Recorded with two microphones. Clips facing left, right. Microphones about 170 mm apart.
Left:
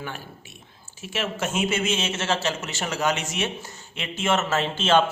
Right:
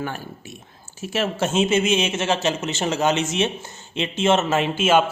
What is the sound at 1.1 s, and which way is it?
A man's voice, 35° right (ahead or behind).